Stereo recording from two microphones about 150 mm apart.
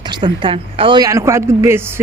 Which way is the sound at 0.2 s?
35° right (ahead or behind).